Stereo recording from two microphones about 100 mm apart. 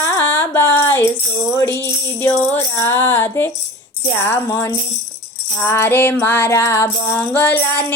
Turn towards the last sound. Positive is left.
turn(degrees=20)  # may be behind; listen again after turning